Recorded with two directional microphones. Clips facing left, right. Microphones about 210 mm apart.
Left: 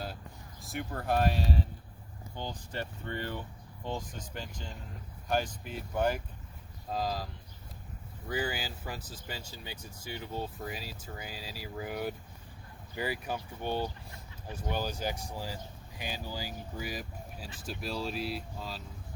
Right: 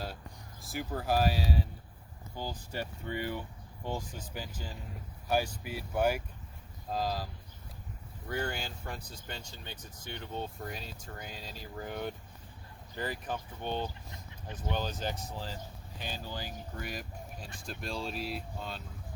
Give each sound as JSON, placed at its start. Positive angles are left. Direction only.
{"t": 0.6, "sound": "speech", "side_deg": 0}
{"t": 8.3, "sound": "speech", "side_deg": 5}